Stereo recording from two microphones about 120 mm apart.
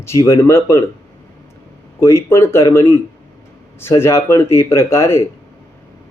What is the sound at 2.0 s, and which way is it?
Speech, 25° left (ahead or behind).